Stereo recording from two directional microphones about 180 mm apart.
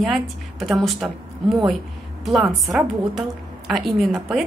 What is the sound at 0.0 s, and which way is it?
A woman's voice, centre (ahead or behind).